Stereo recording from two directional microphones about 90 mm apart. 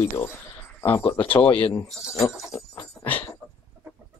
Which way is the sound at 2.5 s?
35° left (ahead or behind).